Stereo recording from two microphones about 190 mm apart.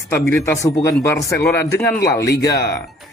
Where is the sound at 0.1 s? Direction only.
15° left (ahead or behind).